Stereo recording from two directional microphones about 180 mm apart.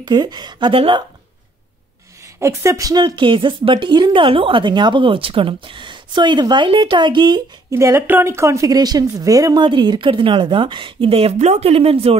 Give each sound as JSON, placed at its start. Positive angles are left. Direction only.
{"t": 0.0, "sound": "speech", "side_deg": -25}
{"t": 2.4, "sound": "speech", "side_deg": -15}
{"t": 7.7, "sound": "speech", "side_deg": -15}